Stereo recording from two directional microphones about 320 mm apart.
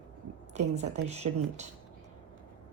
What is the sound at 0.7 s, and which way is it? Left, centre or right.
Speech, centre.